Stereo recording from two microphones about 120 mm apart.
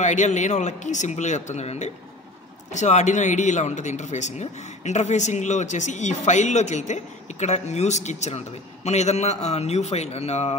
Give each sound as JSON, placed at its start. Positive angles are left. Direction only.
{"t": 0.0, "sound": "a man's voice", "side_deg": 90}